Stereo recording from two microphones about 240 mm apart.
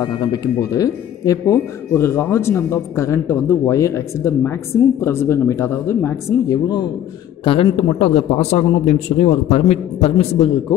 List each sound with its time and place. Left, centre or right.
0.0 s a man's voice: centre